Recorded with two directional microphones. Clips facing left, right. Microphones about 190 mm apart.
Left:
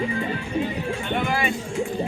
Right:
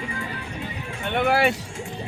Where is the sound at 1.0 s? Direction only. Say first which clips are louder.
Right 6 dB; 65° right (ahead or behind).